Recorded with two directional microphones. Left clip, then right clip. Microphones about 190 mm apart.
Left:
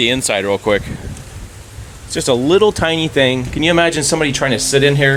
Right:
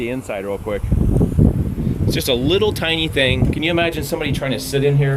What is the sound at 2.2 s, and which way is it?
Speech, 30° left (ahead or behind).